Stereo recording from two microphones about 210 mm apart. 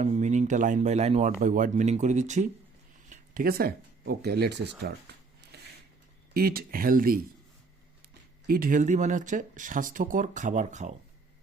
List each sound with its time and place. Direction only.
0.0 s speech: 35° right (ahead or behind); by 4.7 s 55° right (ahead or behind)
5.1 s a sound: 50° right (ahead or behind)
6.3 s speech: 45° right (ahead or behind)
8.4 s speech: 45° right (ahead or behind)